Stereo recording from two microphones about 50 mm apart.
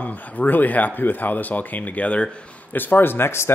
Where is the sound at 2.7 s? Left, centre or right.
Left.